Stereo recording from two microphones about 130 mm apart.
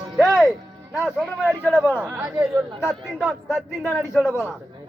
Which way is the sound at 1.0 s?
5° right (ahead or behind).